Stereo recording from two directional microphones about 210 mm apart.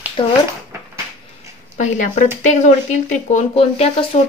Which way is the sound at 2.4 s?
35° left (ahead or behind).